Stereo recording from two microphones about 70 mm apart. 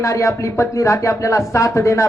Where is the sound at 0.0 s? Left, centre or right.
Left.